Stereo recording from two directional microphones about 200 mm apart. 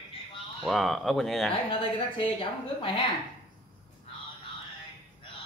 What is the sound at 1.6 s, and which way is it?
A woman's voice, 25° left (ahead or behind).